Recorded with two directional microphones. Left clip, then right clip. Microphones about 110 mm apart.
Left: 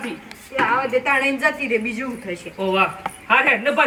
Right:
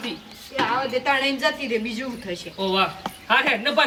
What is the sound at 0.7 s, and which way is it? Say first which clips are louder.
A woman's voice: left 3 dB; 5° left (ahead or behind).